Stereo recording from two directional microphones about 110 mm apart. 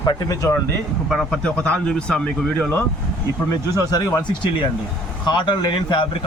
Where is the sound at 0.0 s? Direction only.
35° left (ahead or behind).